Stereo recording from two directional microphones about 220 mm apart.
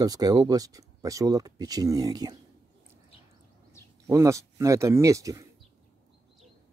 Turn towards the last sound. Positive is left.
turn(degrees=-15)  # may be behind; listen again after turning